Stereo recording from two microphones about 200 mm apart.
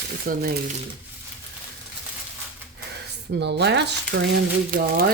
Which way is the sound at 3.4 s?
60° right (ahead or behind).